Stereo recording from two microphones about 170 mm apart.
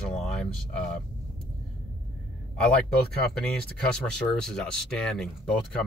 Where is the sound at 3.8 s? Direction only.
5° left (ahead or behind).